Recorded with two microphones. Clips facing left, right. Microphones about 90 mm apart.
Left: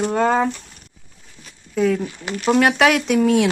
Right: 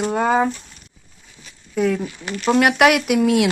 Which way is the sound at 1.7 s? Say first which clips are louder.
Left 1 dB; 5° right (ahead or behind).